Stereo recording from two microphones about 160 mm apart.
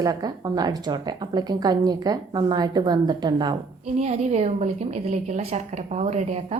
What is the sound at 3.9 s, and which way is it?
A woman's voice, 45° right (ahead or behind).